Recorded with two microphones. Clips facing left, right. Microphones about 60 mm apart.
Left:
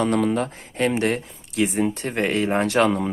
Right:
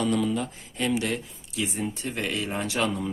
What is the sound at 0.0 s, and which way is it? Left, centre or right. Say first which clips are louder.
Speech: left 5 dB; left.